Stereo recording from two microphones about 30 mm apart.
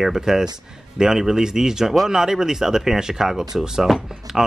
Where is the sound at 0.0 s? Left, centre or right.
Centre.